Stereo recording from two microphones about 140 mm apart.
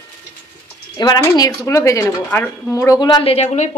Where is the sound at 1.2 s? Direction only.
25° left (ahead or behind).